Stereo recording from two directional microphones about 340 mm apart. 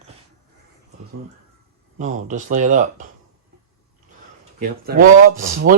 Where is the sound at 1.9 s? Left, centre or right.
Right.